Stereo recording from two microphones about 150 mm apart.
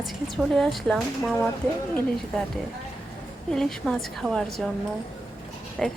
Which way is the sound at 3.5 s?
5° left (ahead or behind).